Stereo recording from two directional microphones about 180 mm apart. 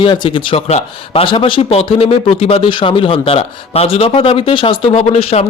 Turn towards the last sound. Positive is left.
turn(degrees=35)  # may be behind; listen again after turning